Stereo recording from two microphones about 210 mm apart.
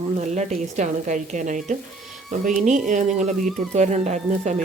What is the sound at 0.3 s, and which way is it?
Speech, 35° right (ahead or behind).